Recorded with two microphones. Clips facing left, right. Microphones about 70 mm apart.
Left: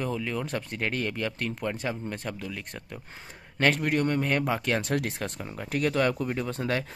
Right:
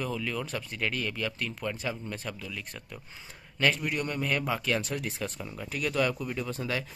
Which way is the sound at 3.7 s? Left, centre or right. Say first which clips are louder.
Left 5 dB; left.